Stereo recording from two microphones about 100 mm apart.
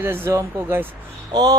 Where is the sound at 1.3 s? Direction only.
40° right (ahead or behind).